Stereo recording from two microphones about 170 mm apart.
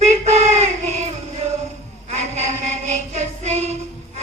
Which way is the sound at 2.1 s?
40° right (ahead or behind).